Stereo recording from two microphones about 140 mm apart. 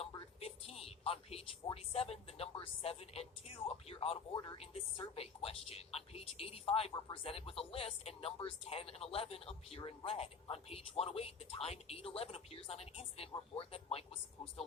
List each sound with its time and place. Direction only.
0.0 s speech: 45° left (ahead or behind)